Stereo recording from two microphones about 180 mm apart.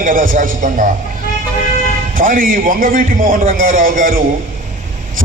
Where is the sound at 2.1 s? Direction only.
50° right (ahead or behind).